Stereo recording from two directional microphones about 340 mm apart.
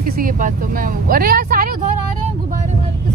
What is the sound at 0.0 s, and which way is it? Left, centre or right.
Speech, right.